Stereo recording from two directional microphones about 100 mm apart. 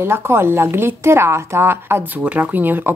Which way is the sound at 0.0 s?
25° right (ahead or behind).